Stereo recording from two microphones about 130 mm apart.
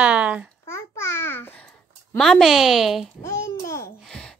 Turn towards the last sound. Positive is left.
turn(degrees=5)  # may be behind; listen again after turning